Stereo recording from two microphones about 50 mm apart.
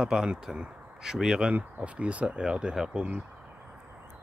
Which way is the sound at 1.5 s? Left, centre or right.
Right.